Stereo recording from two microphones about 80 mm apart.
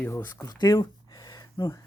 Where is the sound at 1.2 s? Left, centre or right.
Left.